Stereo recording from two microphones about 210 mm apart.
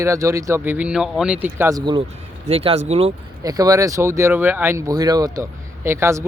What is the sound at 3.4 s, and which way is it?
Speech, 15° right (ahead or behind).